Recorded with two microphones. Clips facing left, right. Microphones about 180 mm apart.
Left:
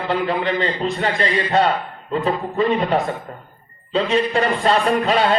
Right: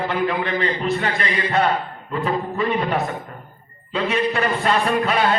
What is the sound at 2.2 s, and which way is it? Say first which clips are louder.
A man's voice: left 2 dB; 30° left (ahead or behind).